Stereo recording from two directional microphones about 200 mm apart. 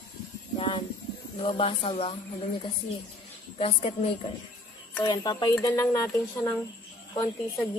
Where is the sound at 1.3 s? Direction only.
25° left (ahead or behind).